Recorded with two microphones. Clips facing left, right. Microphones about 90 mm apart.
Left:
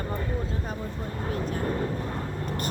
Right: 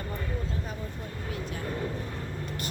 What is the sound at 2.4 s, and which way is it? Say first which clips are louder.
Vehicle: left 5 dB; 40° left (ahead or behind).